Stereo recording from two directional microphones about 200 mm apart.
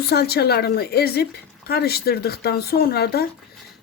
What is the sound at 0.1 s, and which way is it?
Speech, 50° left (ahead or behind).